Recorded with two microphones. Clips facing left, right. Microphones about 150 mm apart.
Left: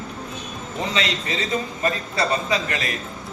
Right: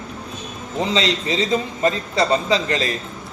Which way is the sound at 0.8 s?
30° right (ahead or behind).